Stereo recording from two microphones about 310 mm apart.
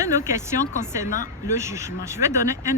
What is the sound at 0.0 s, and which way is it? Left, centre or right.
Speech, centre.